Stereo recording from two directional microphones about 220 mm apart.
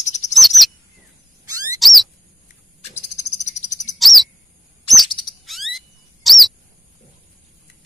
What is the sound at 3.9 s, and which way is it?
Bird, centre (ahead or behind).